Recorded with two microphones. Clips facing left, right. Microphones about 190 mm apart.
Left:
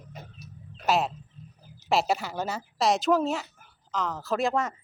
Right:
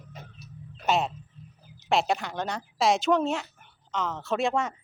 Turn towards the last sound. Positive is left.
turn(degrees=0)  # may be behind; listen again after turning